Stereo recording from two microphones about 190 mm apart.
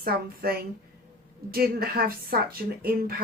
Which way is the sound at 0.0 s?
50° right (ahead or behind).